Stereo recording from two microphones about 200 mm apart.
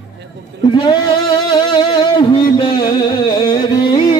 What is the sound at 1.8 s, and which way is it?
Music, 25° left (ahead or behind).